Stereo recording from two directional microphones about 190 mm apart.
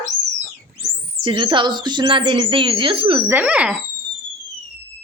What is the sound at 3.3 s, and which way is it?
Speech, 10° right (ahead or behind).